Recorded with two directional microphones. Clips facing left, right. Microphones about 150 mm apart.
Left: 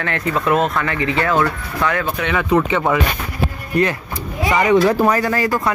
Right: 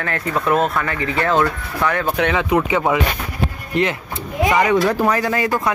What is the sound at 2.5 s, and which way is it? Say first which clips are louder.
Speech: left 3 dB; 10° right (ahead or behind).